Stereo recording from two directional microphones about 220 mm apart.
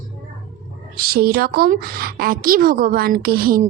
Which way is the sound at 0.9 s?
45° right (ahead or behind).